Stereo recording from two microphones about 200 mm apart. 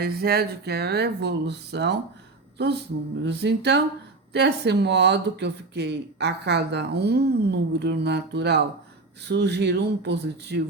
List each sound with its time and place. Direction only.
0.0 s speech: 50° right (ahead or behind)